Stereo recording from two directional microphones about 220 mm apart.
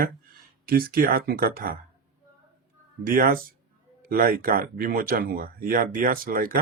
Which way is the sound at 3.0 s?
40° right (ahead or behind).